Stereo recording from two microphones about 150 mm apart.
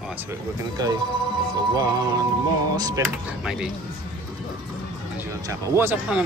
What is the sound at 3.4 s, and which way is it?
Speech, 5° right (ahead or behind).